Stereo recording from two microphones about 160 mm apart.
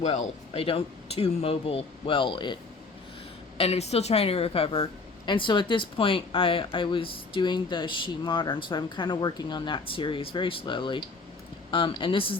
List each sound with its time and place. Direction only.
0.0 s a woman's voice: 45° left (ahead or behind)
3.6 s a woman's voice: 40° left (ahead or behind)